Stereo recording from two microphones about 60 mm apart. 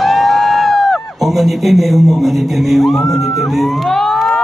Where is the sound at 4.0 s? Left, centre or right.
Centre.